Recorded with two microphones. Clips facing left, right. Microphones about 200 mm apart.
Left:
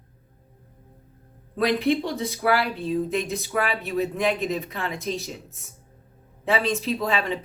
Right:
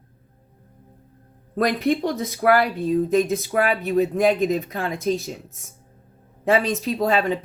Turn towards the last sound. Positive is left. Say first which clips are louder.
# right 4 dB
turn(degrees=-40)  # may be behind; listen again after turning